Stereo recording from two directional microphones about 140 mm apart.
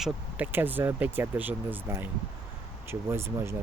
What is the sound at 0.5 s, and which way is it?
Speech, 15° right (ahead or behind).